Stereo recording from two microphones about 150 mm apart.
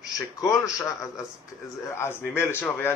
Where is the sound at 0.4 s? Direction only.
20° left (ahead or behind).